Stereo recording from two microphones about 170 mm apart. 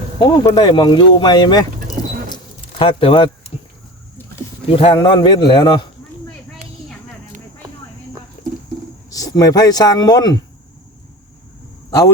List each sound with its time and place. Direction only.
0.5 s speech: 25° left (ahead or behind)
4.7 s a man's voice: 35° left (ahead or behind)
8.4 s a sound: 45° left (ahead or behind)
9.0 s speech: 20° left (ahead or behind)
11.9 s a man's voice: 20° left (ahead or behind)